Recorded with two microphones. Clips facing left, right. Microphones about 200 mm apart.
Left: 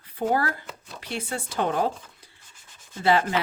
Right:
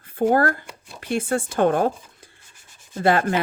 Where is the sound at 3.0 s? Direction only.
50° right (ahead or behind).